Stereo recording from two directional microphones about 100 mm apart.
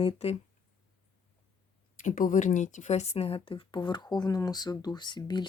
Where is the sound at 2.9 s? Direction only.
90° left.